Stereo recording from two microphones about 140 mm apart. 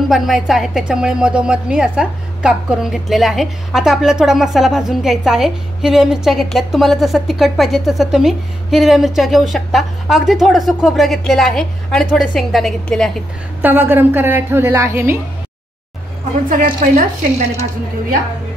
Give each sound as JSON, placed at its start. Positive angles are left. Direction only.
{"t": 0.1, "sound": "a woman's voice", "side_deg": 0}
{"t": 13.6, "sound": "a woman's voice", "side_deg": -15}
{"t": 16.4, "sound": "a woman's voice", "side_deg": -75}